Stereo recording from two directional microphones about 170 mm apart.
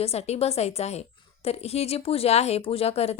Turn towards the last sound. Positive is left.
turn(degrees=35)  # may be behind; listen again after turning